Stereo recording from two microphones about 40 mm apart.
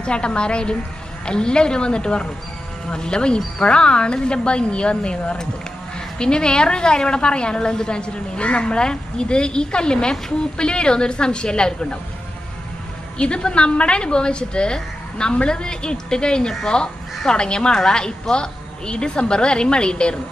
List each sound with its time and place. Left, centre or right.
0.0 s a woman's voice: left
13.2 s a woman's voice: left